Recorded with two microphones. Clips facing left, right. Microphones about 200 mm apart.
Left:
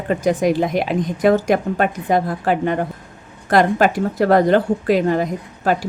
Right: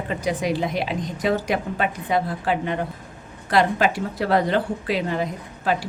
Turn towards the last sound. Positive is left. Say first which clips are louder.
# left 4 dB
turn(degrees=45)  # may be behind; listen again after turning